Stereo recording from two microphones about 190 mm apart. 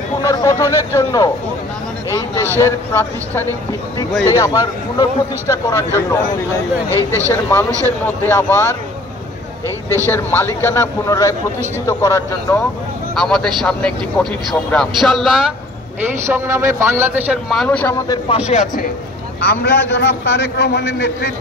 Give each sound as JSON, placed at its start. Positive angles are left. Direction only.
{"t": 0.2, "sound": "a man's voice", "side_deg": 15}
{"t": 2.6, "sound": "a man's voice", "side_deg": 10}
{"t": 6.9, "sound": "a man's voice", "side_deg": -15}
{"t": 8.0, "sound": "speech", "side_deg": 10}
{"t": 10.0, "sound": "speech", "side_deg": 10}
{"t": 13.1, "sound": "a man's voice", "side_deg": 0}
{"t": 16.3, "sound": "a man's voice", "side_deg": -15}
{"t": 18.0, "sound": "a man's voice", "side_deg": 20}
{"t": 18.4, "sound": "speech", "side_deg": 35}
{"t": 19.4, "sound": "a man's voice", "side_deg": 55}